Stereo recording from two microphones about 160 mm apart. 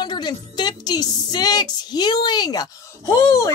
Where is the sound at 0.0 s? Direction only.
25° left (ahead or behind).